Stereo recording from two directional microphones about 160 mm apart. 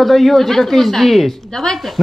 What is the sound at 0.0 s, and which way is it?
A woman's voice, centre (ahead or behind).